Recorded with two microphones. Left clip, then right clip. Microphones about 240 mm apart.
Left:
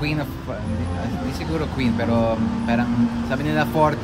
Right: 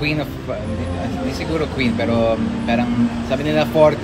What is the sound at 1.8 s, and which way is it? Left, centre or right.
Speech, left.